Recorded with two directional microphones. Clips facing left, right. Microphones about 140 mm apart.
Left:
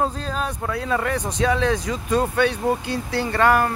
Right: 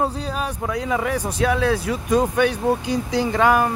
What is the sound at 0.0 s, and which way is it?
Speech, 10° right (ahead or behind).